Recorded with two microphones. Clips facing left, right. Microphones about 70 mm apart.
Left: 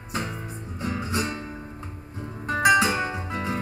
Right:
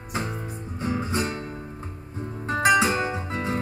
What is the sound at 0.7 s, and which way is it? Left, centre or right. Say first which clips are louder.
Music: right 2 dB; right.